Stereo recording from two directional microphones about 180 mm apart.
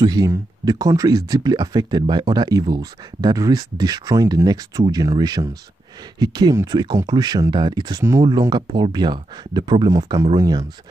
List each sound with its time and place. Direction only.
0.0 s speech: 20° right (ahead or behind)